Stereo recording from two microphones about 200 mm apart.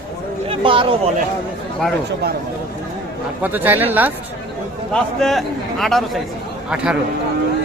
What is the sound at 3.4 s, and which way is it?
Speech, 10° right (ahead or behind).